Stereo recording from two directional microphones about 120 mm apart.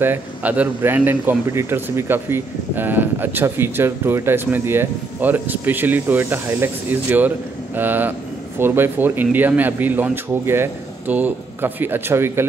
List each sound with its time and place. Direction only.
0.0 s speech: 15° right (ahead or behind)